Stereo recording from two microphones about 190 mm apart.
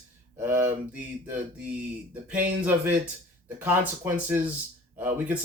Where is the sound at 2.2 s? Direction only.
10° right (ahead or behind).